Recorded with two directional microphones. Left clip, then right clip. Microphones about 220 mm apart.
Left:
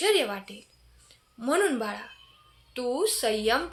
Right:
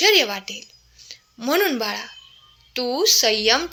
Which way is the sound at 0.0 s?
25° right (ahead or behind).